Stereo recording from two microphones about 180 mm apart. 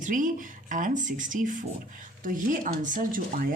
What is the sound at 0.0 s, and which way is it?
Speech, 45° right (ahead or behind).